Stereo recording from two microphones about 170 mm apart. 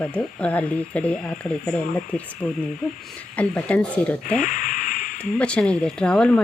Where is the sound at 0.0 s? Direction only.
5° left (ahead or behind).